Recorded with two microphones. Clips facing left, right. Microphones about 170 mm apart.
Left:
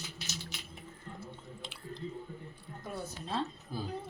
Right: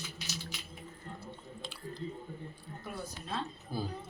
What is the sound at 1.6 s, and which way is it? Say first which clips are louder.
Chewing: right 5 dB; 20° left (ahead or behind).